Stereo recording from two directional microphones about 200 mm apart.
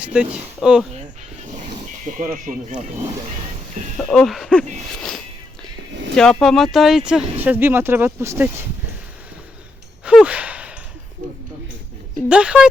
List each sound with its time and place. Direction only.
0.0 s speech: 5° right (ahead or behind)
2.1 s speech: 40° right (ahead or behind)
3.9 s speech: centre (ahead or behind)
6.1 s speech: 5° left (ahead or behind)
10.1 s sigh: 5° right (ahead or behind)
12.3 s speech: 5° right (ahead or behind)